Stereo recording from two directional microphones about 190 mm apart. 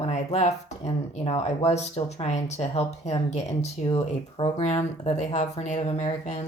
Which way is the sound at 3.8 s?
25° left (ahead or behind).